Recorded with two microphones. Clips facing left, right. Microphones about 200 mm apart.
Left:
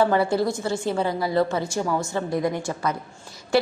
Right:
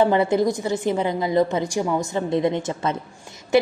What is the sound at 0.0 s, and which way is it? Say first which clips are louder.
A woman's voice: right 2 dB; 20° right (ahead or behind).